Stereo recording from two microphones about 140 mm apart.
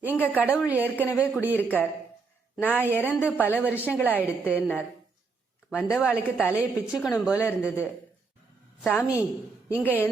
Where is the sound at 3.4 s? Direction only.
15° left (ahead or behind).